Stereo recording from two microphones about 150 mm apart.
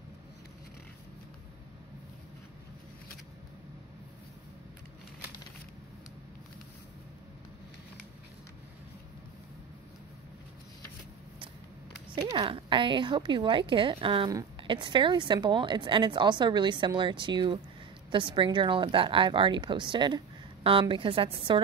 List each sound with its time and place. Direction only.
12.4 s a woman's voice: 35° right (ahead or behind)